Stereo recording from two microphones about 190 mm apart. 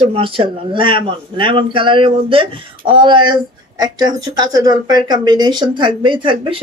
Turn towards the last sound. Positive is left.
turn(degrees=-25)  # may be behind; listen again after turning